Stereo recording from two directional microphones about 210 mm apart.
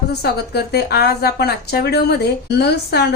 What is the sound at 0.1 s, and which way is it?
A woman's voice, 50° left (ahead or behind).